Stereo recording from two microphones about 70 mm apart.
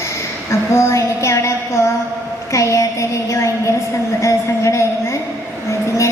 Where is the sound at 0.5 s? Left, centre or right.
Left.